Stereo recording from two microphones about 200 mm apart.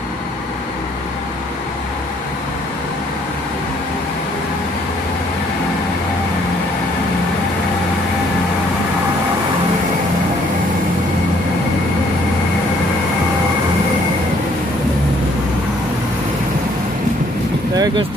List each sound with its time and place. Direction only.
17.7 s vehicle: 20° right (ahead or behind)